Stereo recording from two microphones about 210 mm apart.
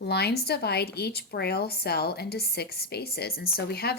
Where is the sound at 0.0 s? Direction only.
50° left (ahead or behind).